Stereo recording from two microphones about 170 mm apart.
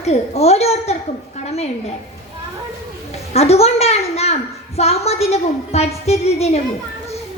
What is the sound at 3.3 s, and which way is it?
A woman's voice, 40° left (ahead or behind).